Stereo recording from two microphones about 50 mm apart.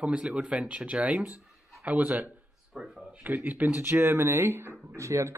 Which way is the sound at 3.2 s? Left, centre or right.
Right.